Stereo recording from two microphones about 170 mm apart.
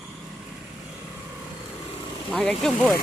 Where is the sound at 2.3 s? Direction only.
5° left (ahead or behind).